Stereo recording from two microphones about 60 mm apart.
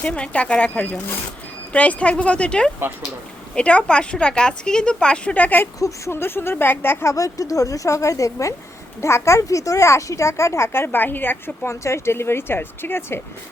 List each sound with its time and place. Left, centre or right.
0.0 s a woman's voice: centre
6.1 s speech: left
7.1 s a woman's voice: left